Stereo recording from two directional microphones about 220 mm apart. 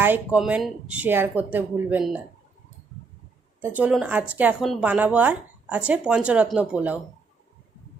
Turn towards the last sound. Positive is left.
turn(degrees=-5)  # may be behind; listen again after turning